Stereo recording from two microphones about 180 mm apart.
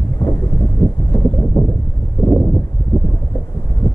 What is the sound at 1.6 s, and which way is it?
Boat, 20° left (ahead or behind).